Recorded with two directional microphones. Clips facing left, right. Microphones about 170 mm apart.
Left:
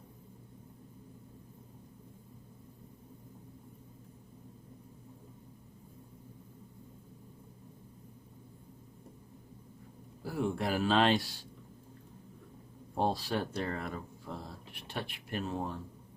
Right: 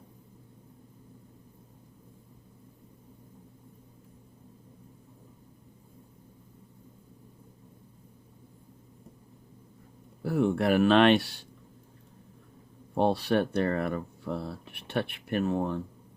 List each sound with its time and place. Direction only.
10.2 s speech: 65° right (ahead or behind)
13.0 s speech: 70° right (ahead or behind)